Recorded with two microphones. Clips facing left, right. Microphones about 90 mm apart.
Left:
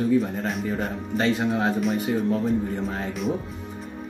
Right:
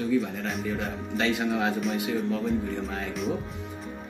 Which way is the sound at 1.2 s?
35° left (ahead or behind).